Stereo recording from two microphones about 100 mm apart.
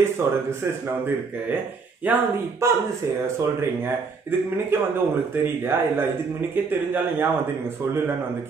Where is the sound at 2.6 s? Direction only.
30° right (ahead or behind).